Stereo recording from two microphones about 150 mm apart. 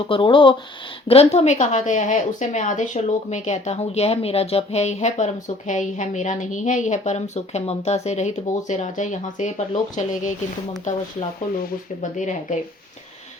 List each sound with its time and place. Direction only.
0.1 s a woman's voice: 35° left (ahead or behind); by 11.0 s 55° left (ahead or behind)
12.1 s a woman's voice: 55° left (ahead or behind)